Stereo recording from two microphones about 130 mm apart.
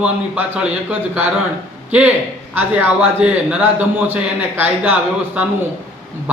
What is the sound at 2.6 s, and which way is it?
A man's voice, 15° right (ahead or behind).